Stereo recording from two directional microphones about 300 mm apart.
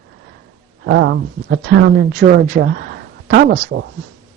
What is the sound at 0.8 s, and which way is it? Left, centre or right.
Speech, right.